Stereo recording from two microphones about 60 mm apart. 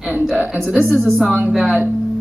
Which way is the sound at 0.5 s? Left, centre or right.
Centre.